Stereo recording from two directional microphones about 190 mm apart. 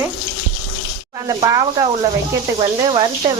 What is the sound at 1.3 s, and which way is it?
Speech, 20° right (ahead or behind).